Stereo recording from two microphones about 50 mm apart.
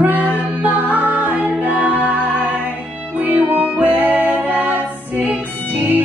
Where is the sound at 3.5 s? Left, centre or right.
Right.